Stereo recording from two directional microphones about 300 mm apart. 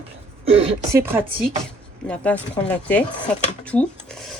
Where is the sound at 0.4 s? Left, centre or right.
Centre.